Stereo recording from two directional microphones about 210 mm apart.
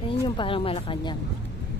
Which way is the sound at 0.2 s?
25° left (ahead or behind).